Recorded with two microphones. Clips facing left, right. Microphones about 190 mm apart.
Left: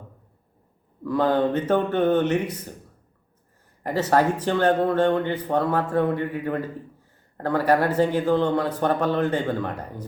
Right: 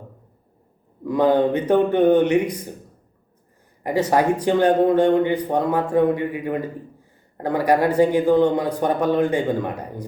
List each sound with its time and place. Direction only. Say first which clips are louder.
1.0 s a man's voice: right 4 dB; 15° right (ahead or behind)
3.8 s a man's voice: right 2 dB; 10° right (ahead or behind)